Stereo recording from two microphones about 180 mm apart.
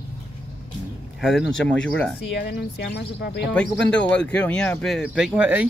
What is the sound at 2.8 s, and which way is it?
Speech, 60° left (ahead or behind).